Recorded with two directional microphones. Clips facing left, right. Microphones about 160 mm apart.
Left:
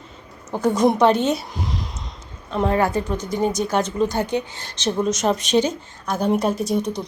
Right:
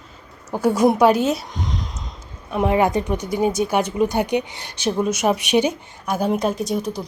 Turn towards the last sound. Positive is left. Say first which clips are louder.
# left 1 dB
turn(degrees=-5)  # may be behind; listen again after turning